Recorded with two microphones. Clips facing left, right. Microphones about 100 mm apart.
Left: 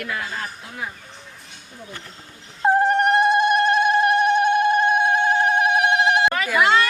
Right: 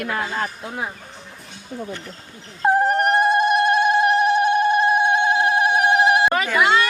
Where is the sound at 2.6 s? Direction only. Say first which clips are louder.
Even; 5° right (ahead or behind).